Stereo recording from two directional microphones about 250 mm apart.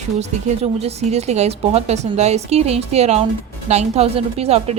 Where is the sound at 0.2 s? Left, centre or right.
Right.